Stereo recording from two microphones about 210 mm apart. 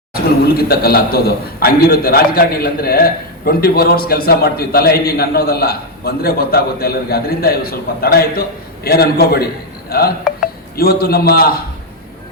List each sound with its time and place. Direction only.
0.1 s a man's voice: 45° left (ahead or behind)